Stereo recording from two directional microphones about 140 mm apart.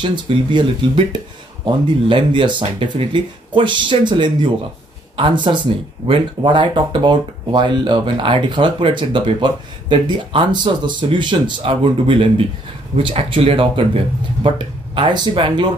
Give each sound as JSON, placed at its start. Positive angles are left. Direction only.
{"t": 0.0, "sound": "speech", "side_deg": -35}